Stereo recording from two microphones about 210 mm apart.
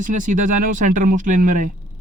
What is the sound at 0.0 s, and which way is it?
Speech, 40° right (ahead or behind).